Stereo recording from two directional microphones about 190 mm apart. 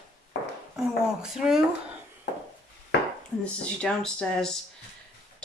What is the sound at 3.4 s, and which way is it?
Speech, 5° left (ahead or behind).